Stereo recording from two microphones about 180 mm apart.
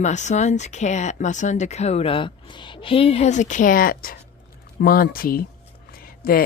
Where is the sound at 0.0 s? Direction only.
40° left (ahead or behind).